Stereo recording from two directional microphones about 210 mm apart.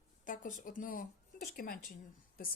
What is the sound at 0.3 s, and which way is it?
Speech, 40° left (ahead or behind).